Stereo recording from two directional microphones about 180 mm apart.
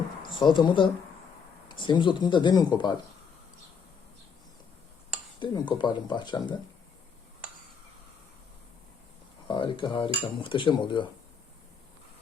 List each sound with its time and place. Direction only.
0.2 s speech: 25° left (ahead or behind)
5.4 s speech: 25° left (ahead or behind)
9.5 s speech: 25° left (ahead or behind)